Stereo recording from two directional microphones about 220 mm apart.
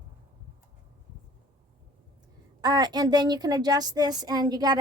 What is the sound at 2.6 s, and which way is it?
A woman's voice, 20° right (ahead or behind).